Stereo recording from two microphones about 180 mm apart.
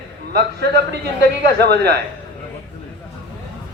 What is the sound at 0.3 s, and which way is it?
A man's voice, 65° right (ahead or behind).